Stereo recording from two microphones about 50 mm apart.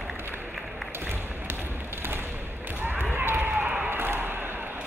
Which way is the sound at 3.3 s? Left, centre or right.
Right.